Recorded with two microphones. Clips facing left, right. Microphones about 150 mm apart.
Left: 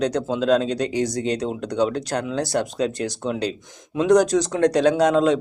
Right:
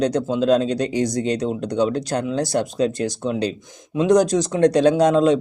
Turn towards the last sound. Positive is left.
turn(degrees=-25)  # may be behind; listen again after turning